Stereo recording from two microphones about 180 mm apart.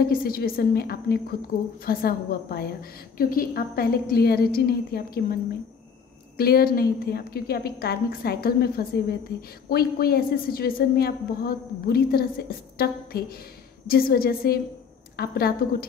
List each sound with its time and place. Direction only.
0.0 s a woman's voice: 55° left (ahead or behind)